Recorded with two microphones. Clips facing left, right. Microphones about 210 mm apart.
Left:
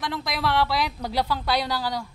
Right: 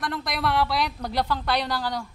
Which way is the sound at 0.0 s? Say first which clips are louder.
Even; centre (ahead or behind).